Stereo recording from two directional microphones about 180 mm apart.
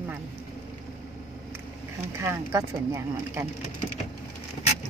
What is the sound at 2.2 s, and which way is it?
Speech, 15° right (ahead or behind).